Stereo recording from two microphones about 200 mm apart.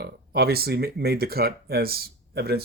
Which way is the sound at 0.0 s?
50° right (ahead or behind).